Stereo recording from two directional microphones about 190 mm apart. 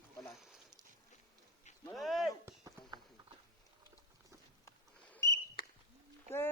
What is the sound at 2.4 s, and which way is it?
Clip-clop, 20° right (ahead or behind).